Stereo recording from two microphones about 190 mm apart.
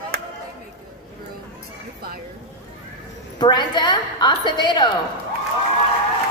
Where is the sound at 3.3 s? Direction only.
25° left (ahead or behind).